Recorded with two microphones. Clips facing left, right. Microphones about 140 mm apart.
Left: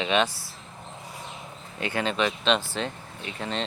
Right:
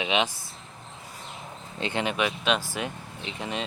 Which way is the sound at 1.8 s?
20° right (ahead or behind).